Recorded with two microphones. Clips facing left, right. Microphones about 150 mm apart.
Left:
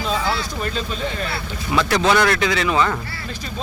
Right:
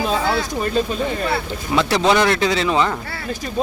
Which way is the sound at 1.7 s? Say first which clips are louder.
Right 1 dB; 25° right (ahead or behind).